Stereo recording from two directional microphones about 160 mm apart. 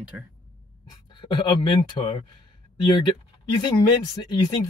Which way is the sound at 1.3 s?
30° left (ahead or behind).